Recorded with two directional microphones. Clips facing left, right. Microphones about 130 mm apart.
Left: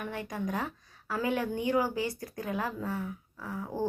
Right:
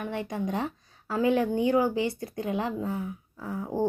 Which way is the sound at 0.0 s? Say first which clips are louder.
Right 4 dB; 25° right (ahead or behind).